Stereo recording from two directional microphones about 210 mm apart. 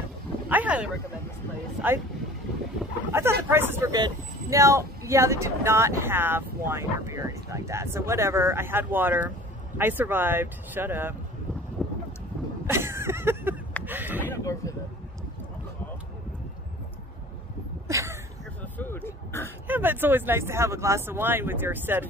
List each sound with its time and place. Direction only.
0.5 s vehicle: 5° right (ahead or behind)
1.8 s speech: 10° right (ahead or behind)
3.1 s speech: 10° right (ahead or behind)
11.8 s wind noise: centre (ahead or behind)
12.6 s a sound: 10° right (ahead or behind)
14.3 s a sound: 15° left (ahead or behind)
17.8 s a sound: 15° right (ahead or behind)
18.6 s throat clearing: 10° left (ahead or behind)
19.7 s speech: 10° right (ahead or behind)